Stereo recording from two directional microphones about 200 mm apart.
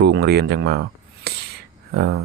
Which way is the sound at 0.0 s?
55° right (ahead or behind).